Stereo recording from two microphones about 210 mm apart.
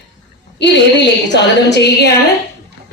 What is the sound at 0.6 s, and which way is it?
A woman's voice, 55° left (ahead or behind).